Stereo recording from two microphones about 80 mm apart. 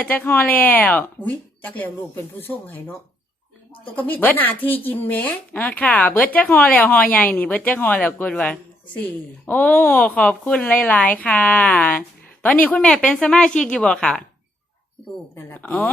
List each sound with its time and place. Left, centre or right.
0.0 s speech: left
3.9 s speech: left
12.9 s speech: centre
15.4 s speech: left